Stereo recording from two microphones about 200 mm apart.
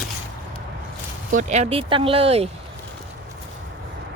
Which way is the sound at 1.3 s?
35° right (ahead or behind).